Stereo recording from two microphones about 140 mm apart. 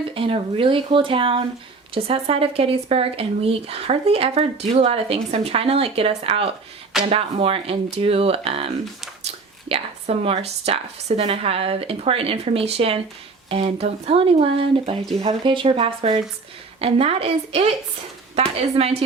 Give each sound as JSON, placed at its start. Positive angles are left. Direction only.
{"t": 0.1, "sound": "speech", "side_deg": -40}